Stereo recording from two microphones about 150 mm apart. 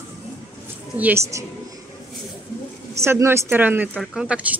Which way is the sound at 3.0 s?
15° right (ahead or behind).